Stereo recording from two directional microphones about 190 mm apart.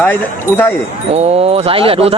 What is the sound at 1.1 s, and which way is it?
Speech, 35° right (ahead or behind).